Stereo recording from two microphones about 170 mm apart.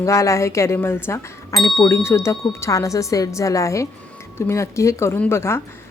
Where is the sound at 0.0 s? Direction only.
20° left (ahead or behind).